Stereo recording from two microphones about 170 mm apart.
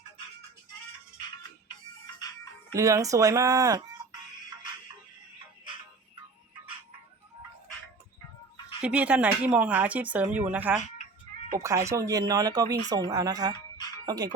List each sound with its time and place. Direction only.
2.1 s music: 20° left (ahead or behind)
2.7 s speech: 20° right (ahead or behind)
8.8 s speech: 5° right (ahead or behind)
11.9 s speech: 20° right (ahead or behind)